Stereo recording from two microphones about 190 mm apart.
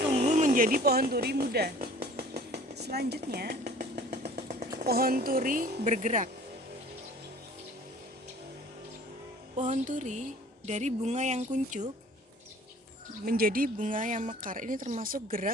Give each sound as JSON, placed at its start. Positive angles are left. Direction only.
{"t": 0.1, "sound": "speech", "side_deg": -35}
{"t": 2.1, "sound": "a sound", "side_deg": -55}
{"t": 3.8, "sound": "motorcycle", "side_deg": -55}
{"t": 4.8, "sound": "speech", "side_deg": -50}
{"t": 9.6, "sound": "speech", "side_deg": -40}
{"t": 13.2, "sound": "speech", "side_deg": -50}